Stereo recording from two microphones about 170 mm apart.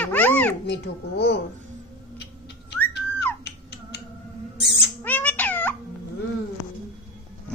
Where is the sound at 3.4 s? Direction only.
75° left (ahead or behind).